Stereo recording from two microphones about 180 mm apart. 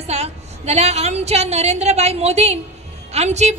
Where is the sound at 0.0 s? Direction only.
35° right (ahead or behind).